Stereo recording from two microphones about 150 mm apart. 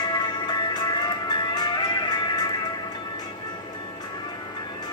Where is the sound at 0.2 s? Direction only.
30° left (ahead or behind).